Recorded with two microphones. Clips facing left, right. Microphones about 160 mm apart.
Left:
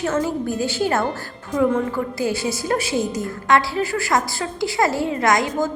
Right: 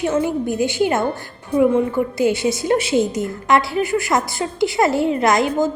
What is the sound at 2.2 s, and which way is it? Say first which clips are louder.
A woman's voice: right 6 dB; 20° right (ahead or behind).